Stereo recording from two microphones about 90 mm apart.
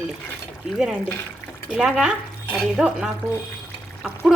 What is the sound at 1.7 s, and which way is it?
Speech, 10° right (ahead or behind).